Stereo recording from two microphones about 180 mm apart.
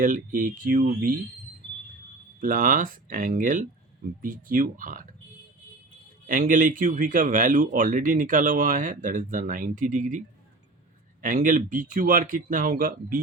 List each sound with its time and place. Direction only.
0.0 s speech: 50° right (ahead or behind)
2.4 s speech: 50° right (ahead or behind)
6.2 s speech: 50° right (ahead or behind)